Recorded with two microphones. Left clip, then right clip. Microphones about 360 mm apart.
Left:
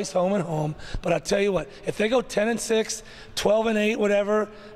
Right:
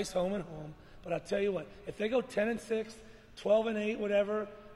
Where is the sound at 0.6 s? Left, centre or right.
Left.